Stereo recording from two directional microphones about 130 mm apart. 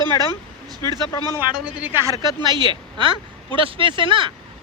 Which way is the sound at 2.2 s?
35° right (ahead or behind).